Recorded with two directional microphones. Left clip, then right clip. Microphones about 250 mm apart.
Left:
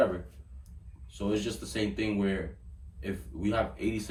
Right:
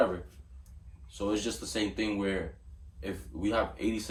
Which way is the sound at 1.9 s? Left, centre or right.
Centre.